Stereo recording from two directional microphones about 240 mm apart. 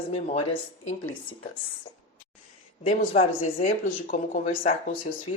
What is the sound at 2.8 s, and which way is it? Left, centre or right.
Speech, left.